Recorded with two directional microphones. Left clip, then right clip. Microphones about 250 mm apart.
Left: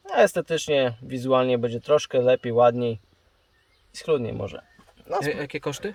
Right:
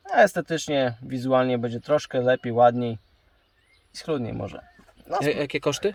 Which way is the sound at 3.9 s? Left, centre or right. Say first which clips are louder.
Left 4 dB; left.